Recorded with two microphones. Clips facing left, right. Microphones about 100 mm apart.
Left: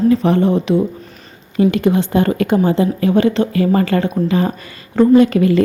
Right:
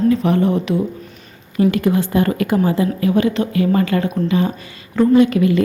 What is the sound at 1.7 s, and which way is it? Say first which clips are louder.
A woman's voice: left 2 dB; 20° left (ahead or behind).